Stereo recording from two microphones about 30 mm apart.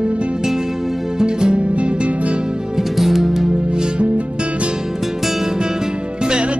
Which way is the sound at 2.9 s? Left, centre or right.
Centre.